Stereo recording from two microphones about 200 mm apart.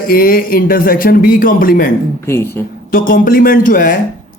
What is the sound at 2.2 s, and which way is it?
Speech, 10° left (ahead or behind).